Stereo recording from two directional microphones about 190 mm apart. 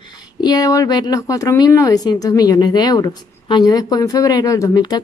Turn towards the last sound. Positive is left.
turn(degrees=20)  # may be behind; listen again after turning